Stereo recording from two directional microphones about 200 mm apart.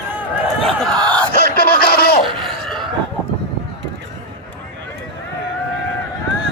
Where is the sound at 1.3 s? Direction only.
50° left (ahead or behind).